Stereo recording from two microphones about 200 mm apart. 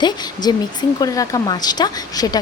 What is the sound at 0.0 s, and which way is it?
Speech, 20° left (ahead or behind).